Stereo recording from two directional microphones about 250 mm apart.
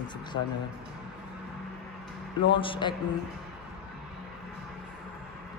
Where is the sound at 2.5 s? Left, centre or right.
Centre.